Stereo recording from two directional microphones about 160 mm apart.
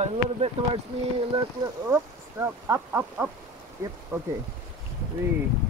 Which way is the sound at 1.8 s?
15° right (ahead or behind).